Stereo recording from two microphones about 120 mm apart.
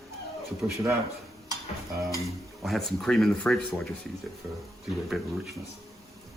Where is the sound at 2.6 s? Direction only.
Centre (ahead or behind).